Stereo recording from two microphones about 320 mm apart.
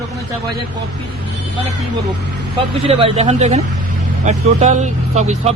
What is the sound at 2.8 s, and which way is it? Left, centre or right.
Speech, centre.